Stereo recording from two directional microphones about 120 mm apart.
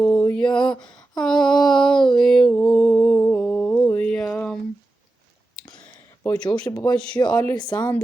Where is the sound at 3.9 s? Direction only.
10° left (ahead or behind).